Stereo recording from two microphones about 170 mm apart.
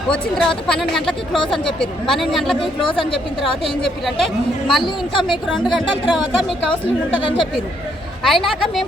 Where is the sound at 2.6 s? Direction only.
30° left (ahead or behind).